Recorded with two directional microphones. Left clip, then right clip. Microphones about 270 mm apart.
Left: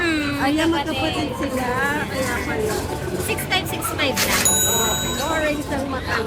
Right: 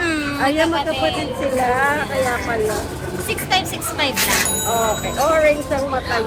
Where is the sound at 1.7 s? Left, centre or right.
Centre.